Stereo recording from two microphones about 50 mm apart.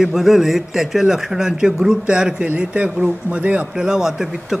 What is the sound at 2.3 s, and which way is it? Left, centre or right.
A man's voice, right.